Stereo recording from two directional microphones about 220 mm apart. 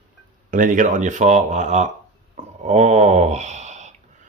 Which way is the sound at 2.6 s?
30° right (ahead or behind).